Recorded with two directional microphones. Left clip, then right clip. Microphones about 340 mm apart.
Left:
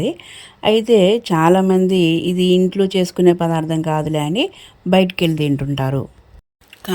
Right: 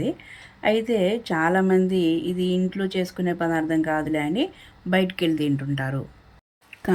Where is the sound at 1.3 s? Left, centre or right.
Centre.